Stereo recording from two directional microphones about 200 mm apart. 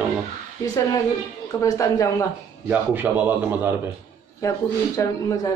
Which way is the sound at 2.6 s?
10° right (ahead or behind).